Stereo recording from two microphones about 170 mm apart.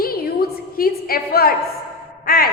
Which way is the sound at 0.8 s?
60° left (ahead or behind).